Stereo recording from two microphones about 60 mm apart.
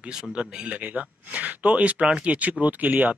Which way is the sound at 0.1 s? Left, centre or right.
Centre.